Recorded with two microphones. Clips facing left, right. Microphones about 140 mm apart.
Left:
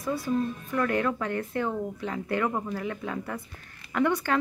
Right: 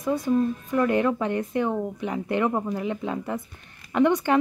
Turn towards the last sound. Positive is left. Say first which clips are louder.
# right 5 dB
turn(degrees=-20)  # may be behind; listen again after turning